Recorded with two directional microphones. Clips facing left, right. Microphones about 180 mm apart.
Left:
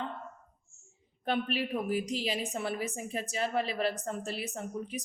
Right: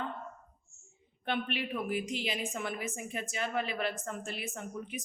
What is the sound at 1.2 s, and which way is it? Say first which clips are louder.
A woman's voice: left 3 dB; 40° left (ahead or behind).